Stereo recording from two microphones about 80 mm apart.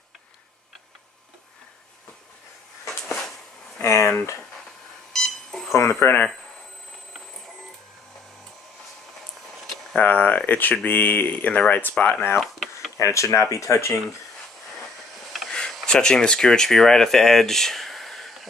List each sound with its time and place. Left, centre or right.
3.8 s speech: left
5.1 s beep: centre
5.7 s speech: left
9.9 s speech: centre
12.4 s a sound: centre
12.9 s speech: left
15.5 s speech: centre